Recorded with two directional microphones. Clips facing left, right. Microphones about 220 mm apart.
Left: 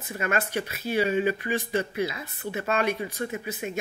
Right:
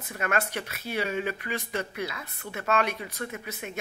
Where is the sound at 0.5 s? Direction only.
30° left (ahead or behind).